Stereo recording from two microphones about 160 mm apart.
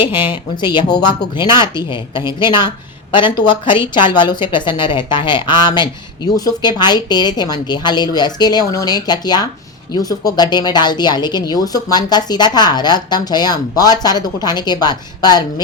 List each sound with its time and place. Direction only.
0.6 s speech: 30° left (ahead or behind)